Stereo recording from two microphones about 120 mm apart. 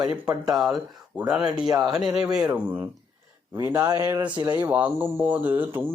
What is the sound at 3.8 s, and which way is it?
Speech, 25° right (ahead or behind).